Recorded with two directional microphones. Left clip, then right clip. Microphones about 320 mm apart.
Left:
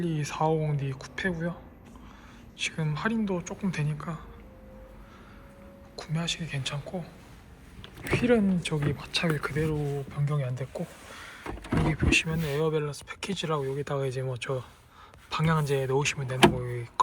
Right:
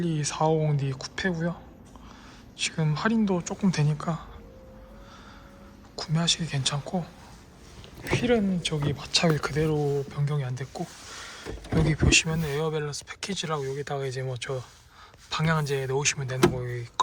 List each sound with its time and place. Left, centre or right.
0.0 s speech: centre
2.6 s speech: centre
6.0 s speech: centre
11.2 s a sound: centre
11.9 s speech: centre